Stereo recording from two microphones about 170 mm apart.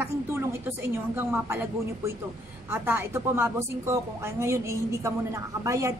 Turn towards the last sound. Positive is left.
turn(degrees=-15)  # may be behind; listen again after turning